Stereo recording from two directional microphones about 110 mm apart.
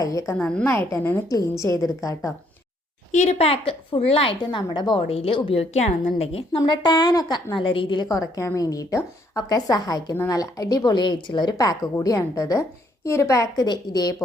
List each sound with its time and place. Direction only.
0.0 s a woman's voice: 30° left (ahead or behind)
0.3 s a woman's voice: 10° left (ahead or behind)
0.7 s a woman's voice: 25° left (ahead or behind)
3.2 s a woman's voice: 75° left (ahead or behind); by 5.0 s 40° left (ahead or behind)
5.0 s a woman's voice: 60° left (ahead or behind)
6.6 s a woman's voice: 40° left (ahead or behind)
7.5 s a woman's voice: 55° left (ahead or behind)
8.0 s a woman's voice: 35° left (ahead or behind)